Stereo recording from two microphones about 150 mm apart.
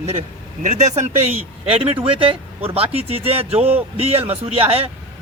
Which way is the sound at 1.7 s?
40° right (ahead or behind).